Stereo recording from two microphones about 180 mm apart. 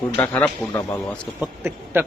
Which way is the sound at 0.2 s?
10° left (ahead or behind).